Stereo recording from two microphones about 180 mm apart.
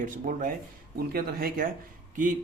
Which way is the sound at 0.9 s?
60° right (ahead or behind).